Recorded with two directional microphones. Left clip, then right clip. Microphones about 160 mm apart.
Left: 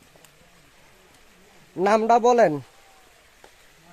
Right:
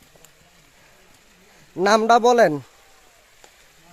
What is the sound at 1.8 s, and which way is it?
Speech, 25° right (ahead or behind).